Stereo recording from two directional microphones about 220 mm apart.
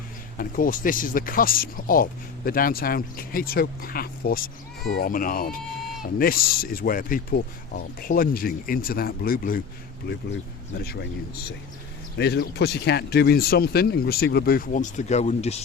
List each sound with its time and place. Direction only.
0.3 s speech: 40° left (ahead or behind)
10.8 s speech: 50° left (ahead or behind)
12.1 s speech: 50° left (ahead or behind); by 15.5 s 30° left (ahead or behind)